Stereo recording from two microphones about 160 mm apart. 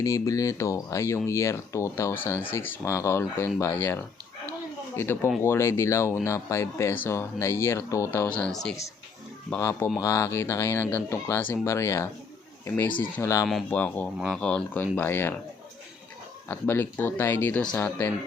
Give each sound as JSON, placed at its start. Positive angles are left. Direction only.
{"t": 0.0, "sound": "speech", "side_deg": 20}
{"t": 8.3, "sound": "speech", "side_deg": 5}
{"t": 9.6, "sound": "speech", "side_deg": 20}
{"t": 13.5, "sound": "speech", "side_deg": 5}
{"t": 16.5, "sound": "speech", "side_deg": 15}